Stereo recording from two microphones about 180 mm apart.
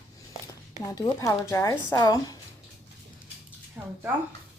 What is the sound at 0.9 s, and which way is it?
Speech, 20° left (ahead or behind).